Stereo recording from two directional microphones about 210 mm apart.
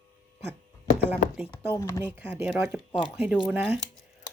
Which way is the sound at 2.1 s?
5° right (ahead or behind).